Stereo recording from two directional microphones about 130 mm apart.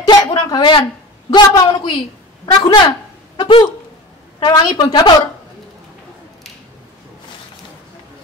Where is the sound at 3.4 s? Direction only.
40° left (ahead or behind).